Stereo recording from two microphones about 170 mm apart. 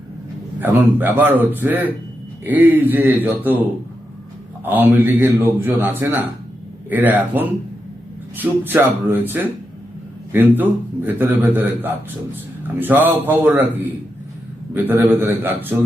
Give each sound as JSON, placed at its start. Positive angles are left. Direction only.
{"t": 0.6, "sound": "a man's voice", "side_deg": -10}